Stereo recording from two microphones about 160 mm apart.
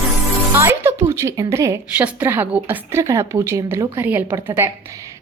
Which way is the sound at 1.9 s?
10° right (ahead or behind).